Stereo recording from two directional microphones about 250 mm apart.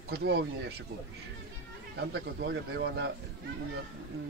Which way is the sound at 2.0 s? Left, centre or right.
Right.